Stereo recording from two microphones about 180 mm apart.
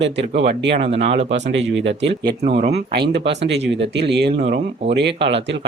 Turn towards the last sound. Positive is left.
turn(degrees=-75)  # may be behind; listen again after turning